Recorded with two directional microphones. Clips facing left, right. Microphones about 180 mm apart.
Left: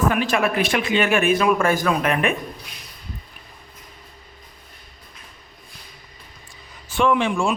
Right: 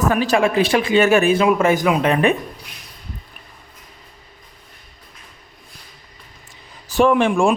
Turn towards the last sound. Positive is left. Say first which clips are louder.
# right 5 dB
turn(degrees=-50)  # may be behind; listen again after turning